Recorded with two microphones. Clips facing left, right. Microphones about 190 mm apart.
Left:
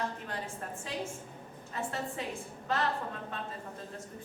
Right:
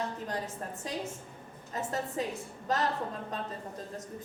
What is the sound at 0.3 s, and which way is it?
A woman's voice, 40° right (ahead or behind).